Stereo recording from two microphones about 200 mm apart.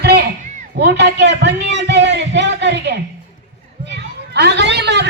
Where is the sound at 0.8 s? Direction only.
60° right (ahead or behind).